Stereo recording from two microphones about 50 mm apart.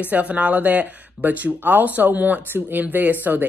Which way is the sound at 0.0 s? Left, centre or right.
Right.